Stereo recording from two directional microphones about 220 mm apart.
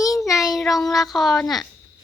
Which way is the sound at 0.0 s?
15° left (ahead or behind).